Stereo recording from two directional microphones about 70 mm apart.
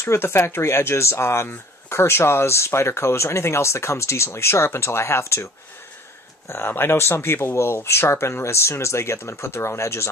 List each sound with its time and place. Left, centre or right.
0.0 s speech: left